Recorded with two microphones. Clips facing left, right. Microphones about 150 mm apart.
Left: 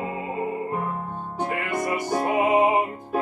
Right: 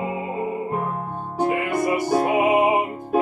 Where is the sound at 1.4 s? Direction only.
10° right (ahead or behind).